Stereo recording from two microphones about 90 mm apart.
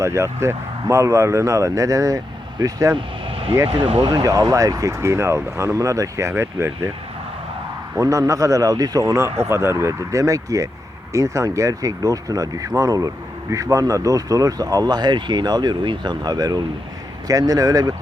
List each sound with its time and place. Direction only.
0.0 s speech: 30° right (ahead or behind)
2.9 s vehicle: 80° right
4.0 s speech: 45° right (ahead or behind); by 6.7 s 25° right (ahead or behind)
7.9 s speech: 40° right (ahead or behind)